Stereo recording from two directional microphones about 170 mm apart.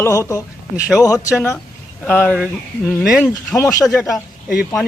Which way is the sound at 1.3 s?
15° left (ahead or behind).